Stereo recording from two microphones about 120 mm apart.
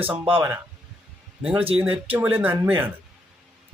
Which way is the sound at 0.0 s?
15° right (ahead or behind).